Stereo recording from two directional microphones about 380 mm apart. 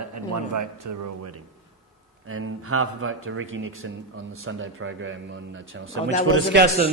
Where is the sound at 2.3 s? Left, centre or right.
Right.